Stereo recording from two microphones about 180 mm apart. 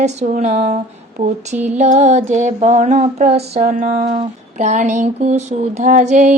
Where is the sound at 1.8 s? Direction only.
40° right (ahead or behind).